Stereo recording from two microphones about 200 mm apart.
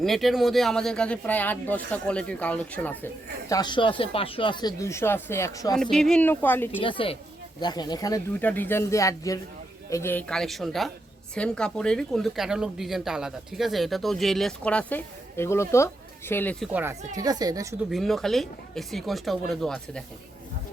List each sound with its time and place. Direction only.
0.0 s speech: centre (ahead or behind)
3.5 s speech: 20° left (ahead or behind)
5.7 s speech: 5° left (ahead or behind)
6.8 s speech: 25° left (ahead or behind); by 16.6 s 10° left (ahead or behind)
16.7 s a woman's voice: 10° right (ahead or behind)
17.9 s speech: centre (ahead or behind)